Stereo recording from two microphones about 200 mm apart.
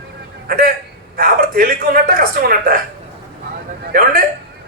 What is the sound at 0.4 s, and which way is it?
A man's voice, 45° right (ahead or behind).